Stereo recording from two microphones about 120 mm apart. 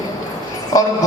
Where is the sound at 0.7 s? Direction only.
30° left (ahead or behind).